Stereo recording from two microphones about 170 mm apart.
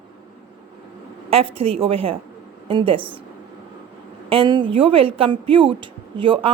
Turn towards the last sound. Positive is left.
turn(degrees=-30)  # may be behind; listen again after turning